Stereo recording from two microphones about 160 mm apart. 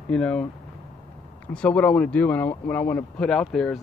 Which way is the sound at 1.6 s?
5° left (ahead or behind).